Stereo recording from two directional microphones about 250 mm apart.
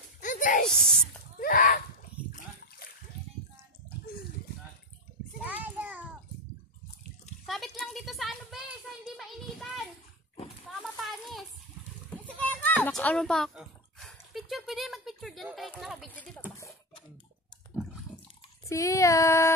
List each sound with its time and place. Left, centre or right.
0.2 s a sound: left
0.7 s speech: centre
1.4 s speech: left
5.4 s child singing: centre
7.4 s a sound: centre
18.7 s child singing: centre